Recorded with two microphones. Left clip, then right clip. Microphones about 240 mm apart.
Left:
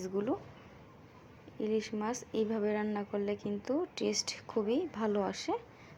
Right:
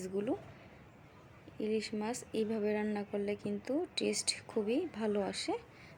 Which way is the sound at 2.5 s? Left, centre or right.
Centre.